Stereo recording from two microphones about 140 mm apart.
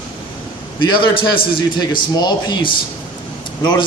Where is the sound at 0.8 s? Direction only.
35° left (ahead or behind).